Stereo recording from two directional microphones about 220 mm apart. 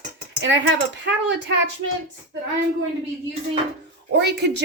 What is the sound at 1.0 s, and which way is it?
Speech, 55° right (ahead or behind).